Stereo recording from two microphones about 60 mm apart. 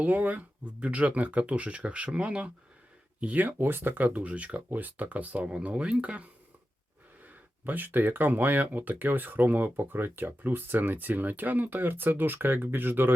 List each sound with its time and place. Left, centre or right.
0.0 s speech: right
7.3 s speech: right